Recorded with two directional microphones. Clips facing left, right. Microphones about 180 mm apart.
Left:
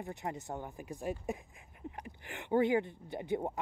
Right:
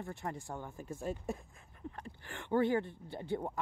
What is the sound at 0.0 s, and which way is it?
Speech, 20° left (ahead or behind).